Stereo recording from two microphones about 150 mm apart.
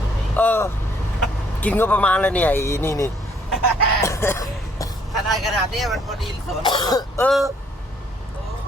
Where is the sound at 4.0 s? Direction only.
20° left (ahead or behind).